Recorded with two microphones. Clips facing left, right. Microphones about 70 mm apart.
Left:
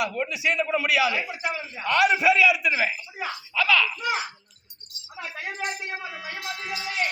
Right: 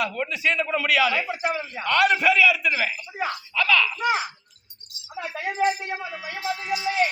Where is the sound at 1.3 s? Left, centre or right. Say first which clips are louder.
Right 4 dB; right.